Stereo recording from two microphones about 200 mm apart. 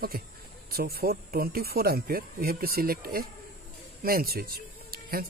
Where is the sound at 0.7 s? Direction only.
50° right (ahead or behind).